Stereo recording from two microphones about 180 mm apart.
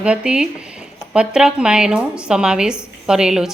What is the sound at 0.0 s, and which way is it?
A woman's voice, 5° right (ahead or behind).